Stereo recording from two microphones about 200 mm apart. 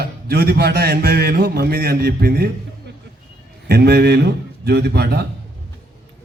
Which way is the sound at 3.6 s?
55° right (ahead or behind).